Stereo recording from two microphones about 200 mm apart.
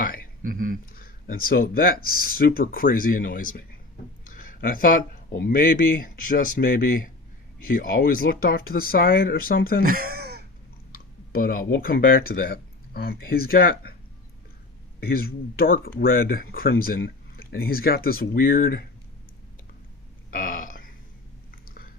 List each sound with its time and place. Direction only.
0.0 s a sound: 45° left (ahead or behind)
0.4 s speech: 45° right (ahead or behind)
0.9 s speech: 45° left (ahead or behind)
9.8 s a sound: 45° right (ahead or behind)
10.9 s clicking: 45° left (ahead or behind)
11.8 s speech: 50° left (ahead or behind)
15.0 s speech: 50° left (ahead or behind)
20.3 s burping: 45° left (ahead or behind)